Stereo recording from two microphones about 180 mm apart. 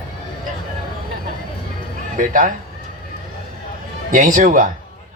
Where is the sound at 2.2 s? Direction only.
45° right (ahead or behind).